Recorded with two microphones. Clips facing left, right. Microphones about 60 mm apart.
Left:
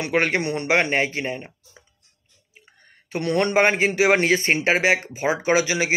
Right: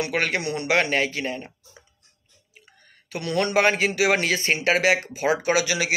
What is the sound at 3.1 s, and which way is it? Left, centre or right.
Speech, left.